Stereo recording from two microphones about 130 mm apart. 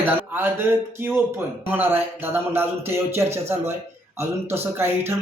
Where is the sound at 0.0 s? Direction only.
15° right (ahead or behind).